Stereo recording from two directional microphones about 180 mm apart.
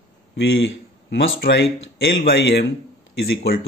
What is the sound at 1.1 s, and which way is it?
Speech, 80° left.